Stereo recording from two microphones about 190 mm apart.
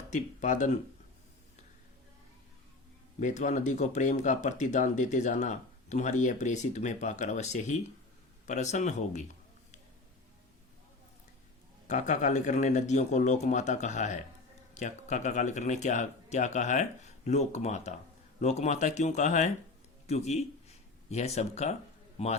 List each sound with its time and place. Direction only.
0.1 s speech: 40° left (ahead or behind)
3.2 s speech: 40° left (ahead or behind)
11.9 s speech: 40° left (ahead or behind)